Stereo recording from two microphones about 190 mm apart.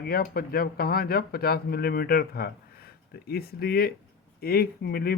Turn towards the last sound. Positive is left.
turn(degrees=55)  # may be behind; listen again after turning